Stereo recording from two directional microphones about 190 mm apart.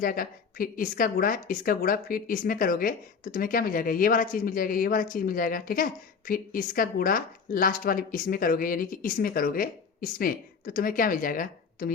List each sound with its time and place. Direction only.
0.0 s a woman's voice: 45° left (ahead or behind)